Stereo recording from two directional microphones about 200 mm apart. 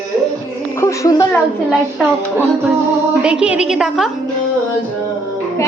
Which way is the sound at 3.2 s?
5° right (ahead or behind).